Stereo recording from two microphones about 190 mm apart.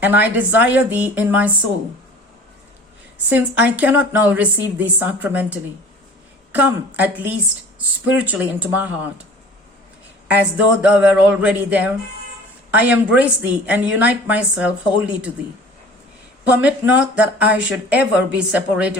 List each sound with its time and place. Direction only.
0.0 s a woman's voice: 10° right (ahead or behind)
3.2 s a woman's voice: 10° right (ahead or behind)
10.2 s a woman's voice: 5° right (ahead or behind)
16.4 s a woman's voice: 5° right (ahead or behind)